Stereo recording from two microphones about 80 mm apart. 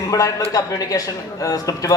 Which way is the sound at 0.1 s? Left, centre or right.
Left.